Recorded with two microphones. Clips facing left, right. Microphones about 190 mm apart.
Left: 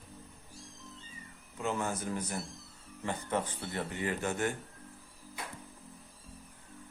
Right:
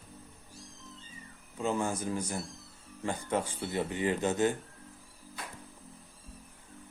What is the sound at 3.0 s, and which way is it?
Speech, 10° right (ahead or behind).